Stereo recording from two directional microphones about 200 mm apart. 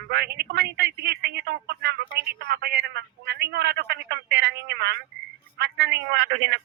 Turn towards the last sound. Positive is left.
turn(degrees=-55)  # may be behind; listen again after turning